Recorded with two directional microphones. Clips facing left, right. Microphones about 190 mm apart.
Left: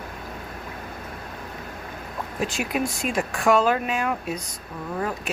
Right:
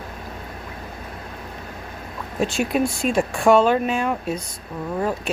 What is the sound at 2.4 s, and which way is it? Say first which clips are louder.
Speech: right 5 dB; 30° right (ahead or behind).